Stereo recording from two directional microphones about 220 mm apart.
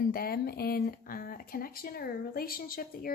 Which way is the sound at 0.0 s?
40° left (ahead or behind).